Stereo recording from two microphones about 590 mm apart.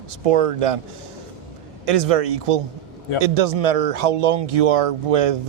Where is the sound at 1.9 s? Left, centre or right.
Right.